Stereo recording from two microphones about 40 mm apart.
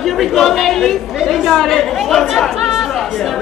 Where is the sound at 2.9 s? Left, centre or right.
Centre.